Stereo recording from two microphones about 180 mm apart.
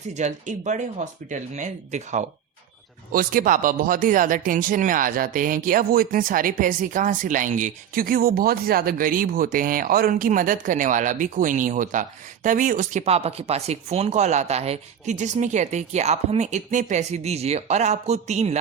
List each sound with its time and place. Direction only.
0.1 s speech: 40° right (ahead or behind)